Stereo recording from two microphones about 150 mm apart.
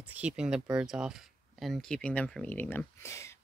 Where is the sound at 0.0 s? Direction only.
10° right (ahead or behind).